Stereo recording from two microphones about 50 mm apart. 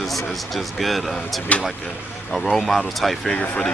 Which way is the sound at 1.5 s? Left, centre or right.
Left.